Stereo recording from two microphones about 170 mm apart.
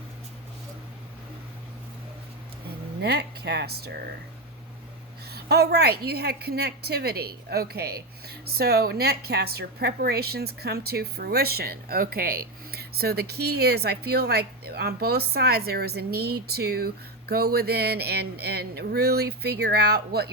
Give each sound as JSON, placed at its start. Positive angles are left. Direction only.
{"t": 3.0, "sound": "a woman's voice", "side_deg": -75}
{"t": 5.3, "sound": "a woman's voice", "side_deg": -70}